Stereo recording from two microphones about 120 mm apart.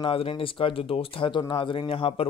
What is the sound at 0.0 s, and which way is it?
Speech, 50° left (ahead or behind).